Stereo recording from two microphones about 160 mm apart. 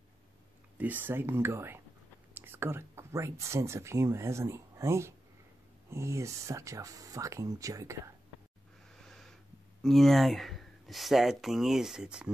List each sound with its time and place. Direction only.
0.7 s speech: 10° right (ahead or behind)
9.0 s wheeze: centre (ahead or behind)
9.8 s speech: centre (ahead or behind)